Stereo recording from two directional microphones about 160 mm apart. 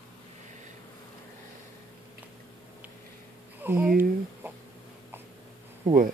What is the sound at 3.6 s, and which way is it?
Speech, 10° right (ahead or behind).